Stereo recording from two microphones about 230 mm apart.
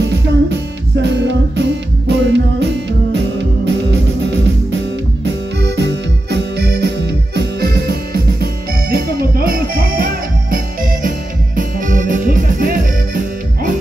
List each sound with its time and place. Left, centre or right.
0.0 s music: right